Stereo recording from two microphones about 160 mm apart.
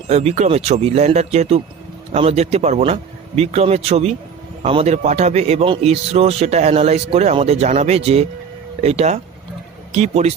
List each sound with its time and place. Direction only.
0.1 s a man's voice: 40° right (ahead or behind)